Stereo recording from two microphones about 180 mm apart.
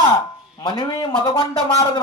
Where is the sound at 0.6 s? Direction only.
30° left (ahead or behind).